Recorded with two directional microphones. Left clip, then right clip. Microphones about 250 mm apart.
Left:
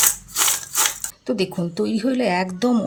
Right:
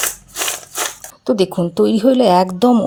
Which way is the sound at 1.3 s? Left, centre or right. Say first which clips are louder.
Right 8 dB; right.